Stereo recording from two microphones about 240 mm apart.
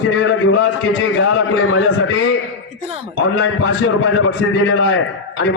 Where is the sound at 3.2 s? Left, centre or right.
Left.